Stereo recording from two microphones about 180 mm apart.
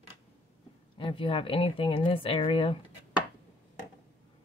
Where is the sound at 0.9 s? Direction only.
30° left (ahead or behind).